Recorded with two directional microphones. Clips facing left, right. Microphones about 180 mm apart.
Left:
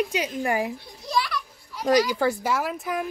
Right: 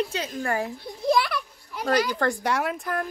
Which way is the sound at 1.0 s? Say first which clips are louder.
Right 5 dB; 55° right (ahead or behind).